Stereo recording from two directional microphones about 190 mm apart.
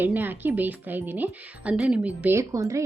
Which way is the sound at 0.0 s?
10° right (ahead or behind).